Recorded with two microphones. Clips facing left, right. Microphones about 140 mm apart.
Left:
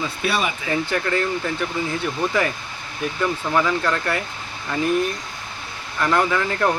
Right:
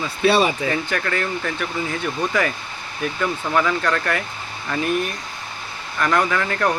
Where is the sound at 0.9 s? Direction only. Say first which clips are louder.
Left 2 dB; 15° left (ahead or behind).